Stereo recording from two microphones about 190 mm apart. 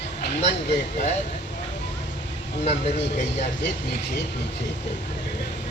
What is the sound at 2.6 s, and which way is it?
Speech, 35° left (ahead or behind).